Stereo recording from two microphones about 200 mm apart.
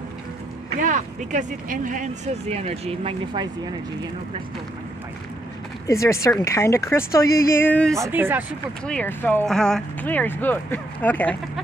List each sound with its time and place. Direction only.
0.7 s speech: 40° right (ahead or behind)
5.9 s speech: 15° left (ahead or behind)
7.9 s speech: 10° right (ahead or behind)
8.8 s speech: 10° left (ahead or behind)